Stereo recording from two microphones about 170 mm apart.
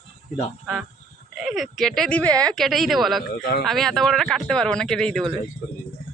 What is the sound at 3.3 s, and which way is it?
Speech, 65° left (ahead or behind).